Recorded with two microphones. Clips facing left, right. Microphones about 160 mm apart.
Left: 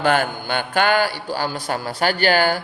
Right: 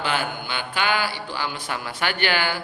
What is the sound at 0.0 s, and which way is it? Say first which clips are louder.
A man's voice: left 7 dB; 50° left (ahead or behind).